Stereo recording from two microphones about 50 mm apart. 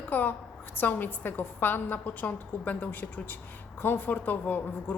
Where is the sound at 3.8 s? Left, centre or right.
Left.